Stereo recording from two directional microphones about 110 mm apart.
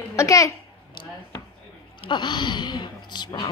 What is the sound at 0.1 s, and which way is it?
Speech, 30° left (ahead or behind).